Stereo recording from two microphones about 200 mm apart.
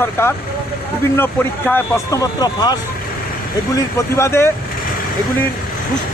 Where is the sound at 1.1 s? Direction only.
10° left (ahead or behind).